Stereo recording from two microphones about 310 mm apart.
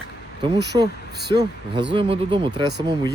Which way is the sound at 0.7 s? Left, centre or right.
Centre.